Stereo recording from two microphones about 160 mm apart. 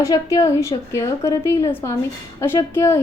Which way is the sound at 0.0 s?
20° left (ahead or behind).